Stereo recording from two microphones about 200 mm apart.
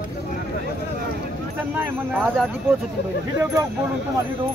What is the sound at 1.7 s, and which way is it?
Speech, 10° right (ahead or behind).